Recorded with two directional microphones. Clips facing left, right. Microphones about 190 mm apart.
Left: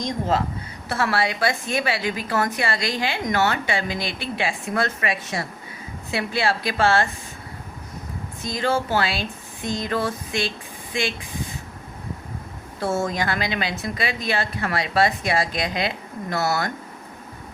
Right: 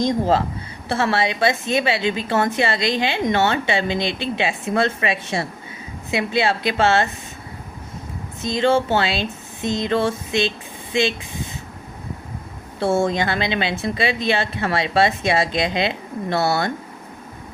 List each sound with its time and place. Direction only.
0.0 s a woman's voice: 30° right (ahead or behind)
8.4 s a woman's voice: 25° right (ahead or behind)
12.8 s a woman's voice: 30° right (ahead or behind)